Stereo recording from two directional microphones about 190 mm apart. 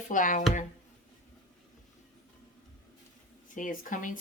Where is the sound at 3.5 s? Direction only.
45° left (ahead or behind).